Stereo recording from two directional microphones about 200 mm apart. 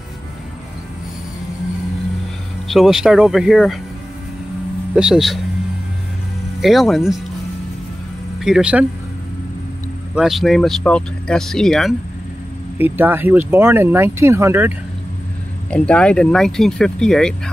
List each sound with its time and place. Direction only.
2.7 s speech: centre (ahead or behind)
4.9 s speech: 5° right (ahead or behind)
6.6 s speech: centre (ahead or behind)
8.4 s speech: centre (ahead or behind)
10.1 s speech: centre (ahead or behind)
12.7 s speech: 10° right (ahead or behind)
15.7 s speech: 5° left (ahead or behind)